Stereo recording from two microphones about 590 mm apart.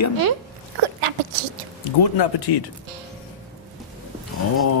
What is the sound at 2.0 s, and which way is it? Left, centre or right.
Speech, left.